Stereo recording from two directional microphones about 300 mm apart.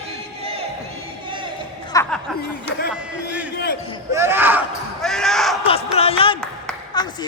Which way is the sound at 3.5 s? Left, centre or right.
Left.